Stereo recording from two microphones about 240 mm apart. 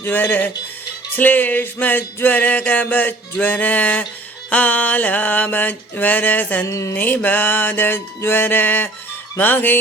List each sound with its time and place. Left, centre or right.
0.0 s mantra: centre